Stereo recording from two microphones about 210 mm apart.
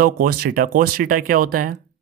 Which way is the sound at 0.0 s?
45° right (ahead or behind).